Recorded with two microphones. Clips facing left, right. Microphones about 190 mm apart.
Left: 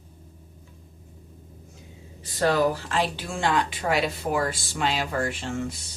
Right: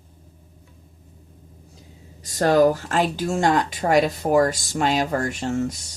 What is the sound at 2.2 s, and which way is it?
Speech, 45° right (ahead or behind).